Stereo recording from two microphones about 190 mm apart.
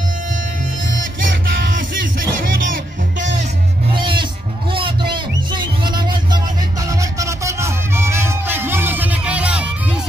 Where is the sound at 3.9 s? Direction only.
25° right (ahead or behind).